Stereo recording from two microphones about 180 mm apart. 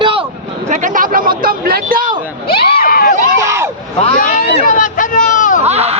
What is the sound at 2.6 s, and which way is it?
Speech, 60° left (ahead or behind).